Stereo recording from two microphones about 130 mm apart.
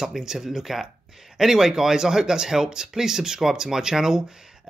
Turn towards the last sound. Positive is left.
turn(degrees=-5)  # may be behind; listen again after turning